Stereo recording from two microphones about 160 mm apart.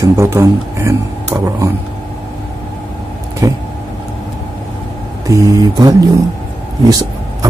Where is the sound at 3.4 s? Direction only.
20° right (ahead or behind).